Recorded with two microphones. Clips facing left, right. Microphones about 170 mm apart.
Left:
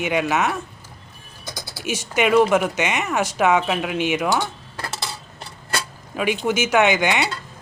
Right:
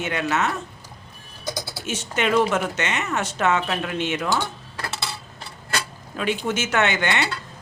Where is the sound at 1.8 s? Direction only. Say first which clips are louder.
Left 4 dB; 10° left (ahead or behind).